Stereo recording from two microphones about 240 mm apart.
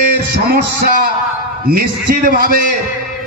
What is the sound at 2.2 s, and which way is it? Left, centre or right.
Speech, right.